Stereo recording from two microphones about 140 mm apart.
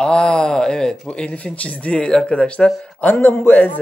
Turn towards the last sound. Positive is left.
turn(degrees=15)  # may be behind; listen again after turning